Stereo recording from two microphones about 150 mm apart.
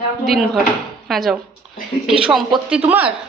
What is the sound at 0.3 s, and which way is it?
A woman's voice, centre (ahead or behind).